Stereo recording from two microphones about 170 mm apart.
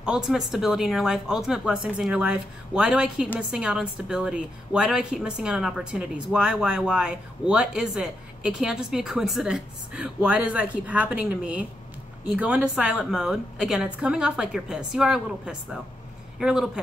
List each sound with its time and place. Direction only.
0.0 s a woman's voice: 5° right (ahead or behind)